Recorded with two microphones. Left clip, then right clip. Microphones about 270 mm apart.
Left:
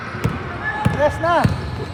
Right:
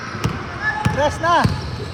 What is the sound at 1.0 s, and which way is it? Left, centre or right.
Speech, right.